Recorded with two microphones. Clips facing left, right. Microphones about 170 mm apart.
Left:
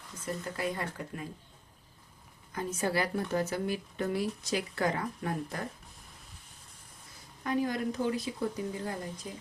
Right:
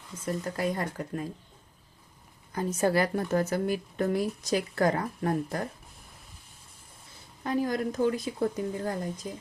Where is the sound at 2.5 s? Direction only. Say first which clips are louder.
Right 6 dB; 40° right (ahead or behind).